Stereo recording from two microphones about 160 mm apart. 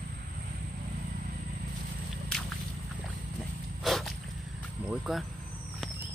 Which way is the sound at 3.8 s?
Centre (ahead or behind).